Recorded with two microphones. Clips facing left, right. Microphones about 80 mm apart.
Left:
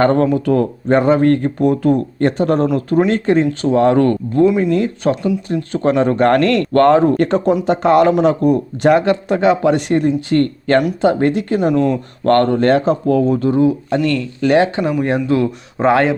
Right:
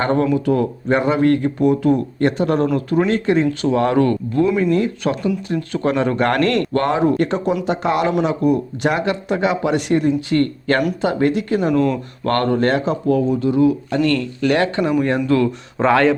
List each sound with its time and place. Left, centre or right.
0.0 s speech: left
3.9 s speech: left
4.4 s speech: left
4.8 s speech: left
6.7 s speech: left
11.7 s speech: centre
12.2 s speech: left
13.6 s speech: left
14.0 s speech: right
14.4 s speech: left
14.8 s speech: centre
15.3 s speech: centre